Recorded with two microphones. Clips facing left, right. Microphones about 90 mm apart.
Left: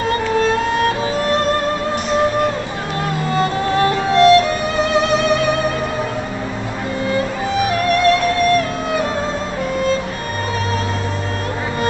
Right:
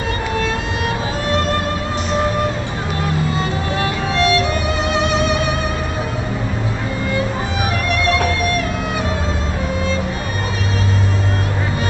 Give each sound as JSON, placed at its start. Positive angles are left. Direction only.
{"t": 3.3, "sound": "music", "side_deg": 40}